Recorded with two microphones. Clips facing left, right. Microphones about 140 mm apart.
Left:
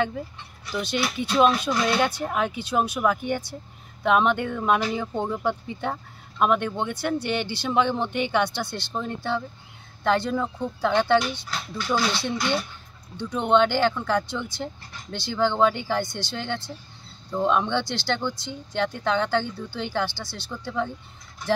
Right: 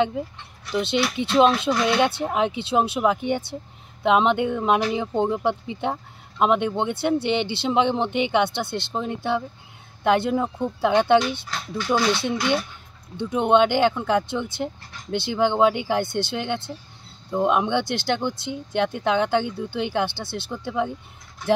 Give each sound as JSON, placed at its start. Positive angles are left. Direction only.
{"t": 0.7, "sound": "speech", "side_deg": -20}